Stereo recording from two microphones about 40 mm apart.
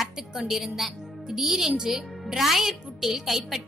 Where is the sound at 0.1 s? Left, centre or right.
Centre.